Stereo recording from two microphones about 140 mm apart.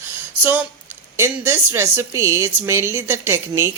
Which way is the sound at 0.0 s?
10° right (ahead or behind).